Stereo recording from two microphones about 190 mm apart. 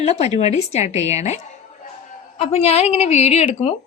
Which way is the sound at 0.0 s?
35° left (ahead or behind).